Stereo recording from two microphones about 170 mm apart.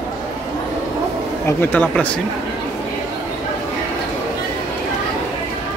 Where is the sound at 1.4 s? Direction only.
10° left (ahead or behind).